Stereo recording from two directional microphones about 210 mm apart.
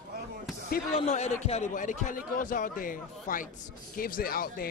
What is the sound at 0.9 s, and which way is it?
A man's voice, 30° left (ahead or behind).